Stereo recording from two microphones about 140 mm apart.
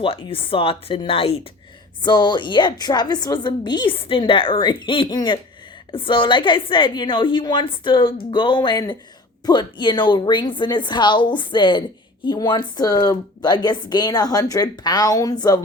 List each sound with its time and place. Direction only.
0.0 s a woman's voice: 40° left (ahead or behind)
2.0 s a woman's voice: 30° left (ahead or behind)